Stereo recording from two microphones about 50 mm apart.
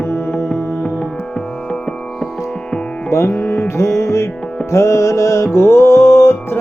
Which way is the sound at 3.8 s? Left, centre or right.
Left.